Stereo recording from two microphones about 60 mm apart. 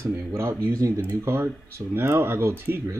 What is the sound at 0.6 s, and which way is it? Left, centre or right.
Speech, right.